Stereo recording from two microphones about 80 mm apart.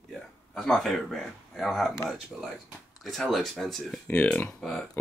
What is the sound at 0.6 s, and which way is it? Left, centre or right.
Speech, centre.